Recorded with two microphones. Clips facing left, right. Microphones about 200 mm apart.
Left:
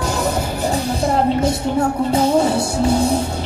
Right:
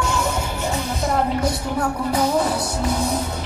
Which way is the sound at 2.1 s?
25° left (ahead or behind).